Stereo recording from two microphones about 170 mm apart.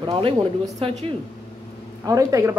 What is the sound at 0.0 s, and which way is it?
Speech, 30° right (ahead or behind).